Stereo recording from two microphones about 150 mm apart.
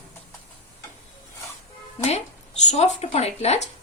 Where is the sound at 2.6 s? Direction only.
50° left (ahead or behind).